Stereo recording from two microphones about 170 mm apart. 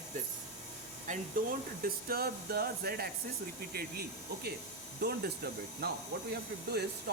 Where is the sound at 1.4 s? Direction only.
55° right (ahead or behind).